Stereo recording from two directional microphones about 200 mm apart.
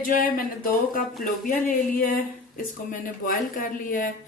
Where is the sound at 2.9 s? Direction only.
45° left (ahead or behind).